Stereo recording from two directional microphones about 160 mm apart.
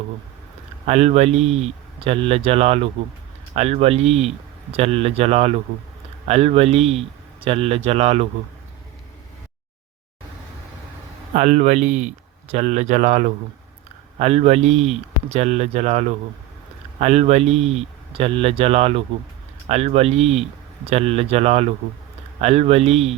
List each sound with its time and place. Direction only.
0.9 s speech: 45° right (ahead or behind)
11.3 s speech: 50° right (ahead or behind)